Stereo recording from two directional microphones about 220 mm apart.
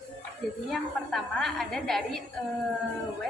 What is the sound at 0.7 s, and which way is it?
A woman's voice, centre (ahead or behind).